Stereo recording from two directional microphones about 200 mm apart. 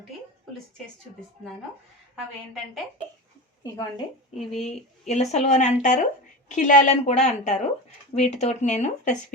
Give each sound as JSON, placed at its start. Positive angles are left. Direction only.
{"t": 3.6, "sound": "speech", "side_deg": 15}
{"t": 4.6, "sound": "a woman's voice", "side_deg": 35}